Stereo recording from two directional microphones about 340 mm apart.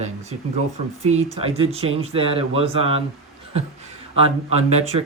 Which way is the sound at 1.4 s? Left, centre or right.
Centre.